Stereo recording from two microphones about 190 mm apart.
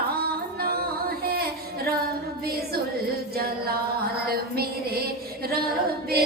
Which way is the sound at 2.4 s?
55° right (ahead or behind).